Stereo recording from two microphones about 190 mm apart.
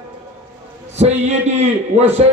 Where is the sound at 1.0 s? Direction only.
35° right (ahead or behind).